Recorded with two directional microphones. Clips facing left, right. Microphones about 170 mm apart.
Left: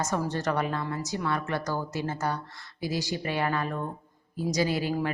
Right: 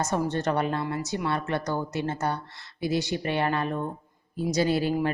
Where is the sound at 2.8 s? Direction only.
60° right (ahead or behind).